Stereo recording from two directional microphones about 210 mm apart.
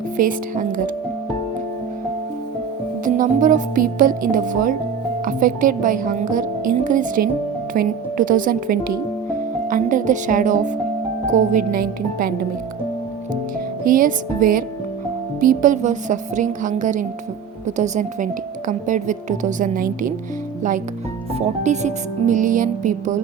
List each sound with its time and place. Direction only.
0.2 s a woman's voice: 40° right (ahead or behind)
3.0 s a woman's voice: 40° right (ahead or behind)
13.8 s a woman's voice: 40° right (ahead or behind)